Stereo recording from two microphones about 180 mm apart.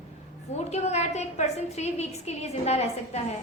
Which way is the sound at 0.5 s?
35° left (ahead or behind).